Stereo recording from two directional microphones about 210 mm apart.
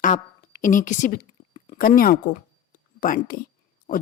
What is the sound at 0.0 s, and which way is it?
A woman's voice, 40° left (ahead or behind).